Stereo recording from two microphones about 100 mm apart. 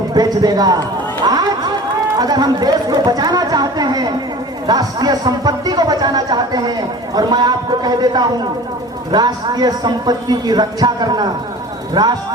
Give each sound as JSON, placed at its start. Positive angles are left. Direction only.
{"t": 0.1, "sound": "a man's voice", "side_deg": -40}
{"t": 1.2, "sound": "a sound", "side_deg": -40}
{"t": 2.1, "sound": "speech", "side_deg": -40}